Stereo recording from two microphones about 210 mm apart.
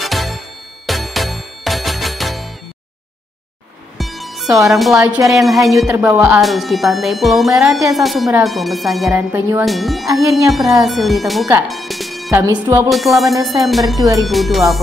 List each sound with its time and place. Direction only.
0.0 s music: centre (ahead or behind)
4.0 s music: centre (ahead or behind)
4.6 s speech: centre (ahead or behind)
12.3 s speech: 15° right (ahead or behind)
12.9 s speech: centre (ahead or behind)
13.9 s speech: 15° right (ahead or behind)
14.2 s speech: centre (ahead or behind)